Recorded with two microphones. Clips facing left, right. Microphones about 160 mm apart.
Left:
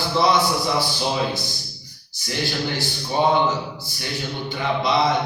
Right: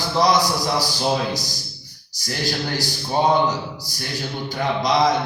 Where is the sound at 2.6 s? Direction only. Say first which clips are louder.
Even; 40° right (ahead or behind).